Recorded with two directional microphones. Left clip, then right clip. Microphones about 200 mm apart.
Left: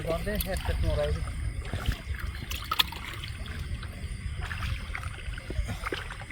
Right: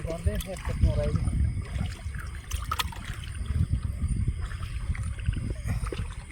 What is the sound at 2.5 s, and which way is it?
Rowboat, 5° right (ahead or behind).